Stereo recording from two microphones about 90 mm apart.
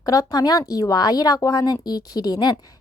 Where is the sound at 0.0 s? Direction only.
40° left (ahead or behind).